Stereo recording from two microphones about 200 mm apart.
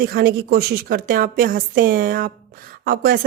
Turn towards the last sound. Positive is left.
turn(degrees=-45)  # may be behind; listen again after turning